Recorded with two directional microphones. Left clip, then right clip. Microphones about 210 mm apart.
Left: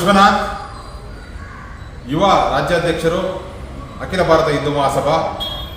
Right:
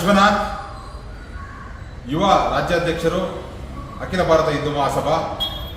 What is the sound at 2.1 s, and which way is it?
A man's voice, 10° left (ahead or behind).